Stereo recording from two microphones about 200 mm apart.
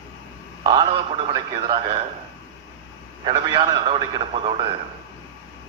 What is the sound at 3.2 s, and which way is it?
A man's voice, 20° right (ahead or behind).